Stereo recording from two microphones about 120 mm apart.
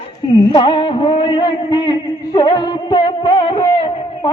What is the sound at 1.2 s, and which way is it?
Music, 40° left (ahead or behind).